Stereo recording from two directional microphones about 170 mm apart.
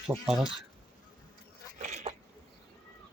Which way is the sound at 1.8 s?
45° right (ahead or behind).